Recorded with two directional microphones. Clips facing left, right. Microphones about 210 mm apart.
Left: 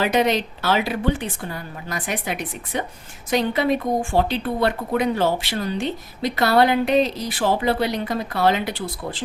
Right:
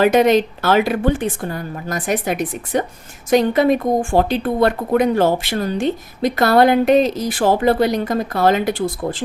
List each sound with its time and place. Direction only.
0.0 s a woman's voice: 50° right (ahead or behind)